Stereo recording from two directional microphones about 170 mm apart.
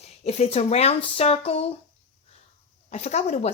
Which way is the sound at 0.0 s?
40° left (ahead or behind).